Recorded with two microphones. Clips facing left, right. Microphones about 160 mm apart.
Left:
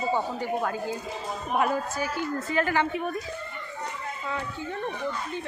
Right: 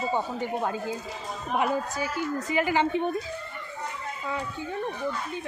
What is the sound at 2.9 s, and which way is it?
Speech, 25° right (ahead or behind).